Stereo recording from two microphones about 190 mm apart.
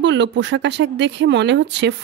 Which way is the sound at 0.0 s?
70° right (ahead or behind).